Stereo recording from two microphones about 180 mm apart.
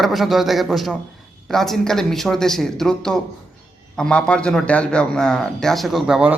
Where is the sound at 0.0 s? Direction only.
Centre (ahead or behind).